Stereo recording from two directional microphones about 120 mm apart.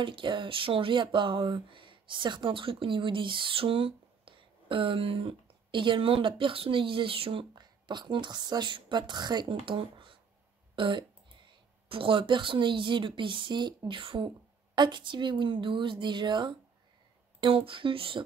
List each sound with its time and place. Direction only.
0.0 s a woman's voice: 45° right (ahead or behind)